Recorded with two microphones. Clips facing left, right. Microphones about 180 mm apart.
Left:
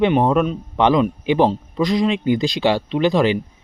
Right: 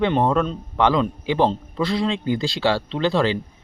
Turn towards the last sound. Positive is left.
turn(degrees=15)  # may be behind; listen again after turning